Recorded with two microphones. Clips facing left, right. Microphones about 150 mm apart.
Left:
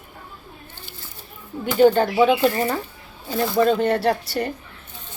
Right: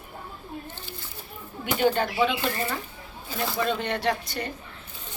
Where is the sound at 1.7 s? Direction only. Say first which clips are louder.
Left 8 dB; 40° left (ahead or behind).